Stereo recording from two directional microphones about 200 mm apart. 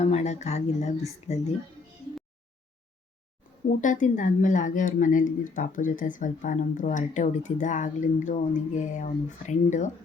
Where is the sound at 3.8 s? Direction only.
40° left (ahead or behind).